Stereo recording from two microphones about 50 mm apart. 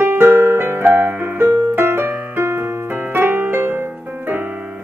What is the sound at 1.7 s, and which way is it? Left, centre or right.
Piano, right.